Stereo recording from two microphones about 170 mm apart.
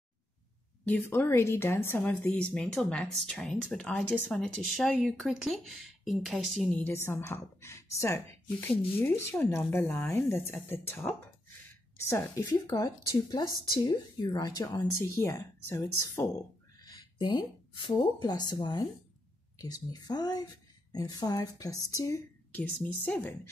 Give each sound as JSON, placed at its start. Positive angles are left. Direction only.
{"t": 0.8, "sound": "a woman's voice", "side_deg": 10}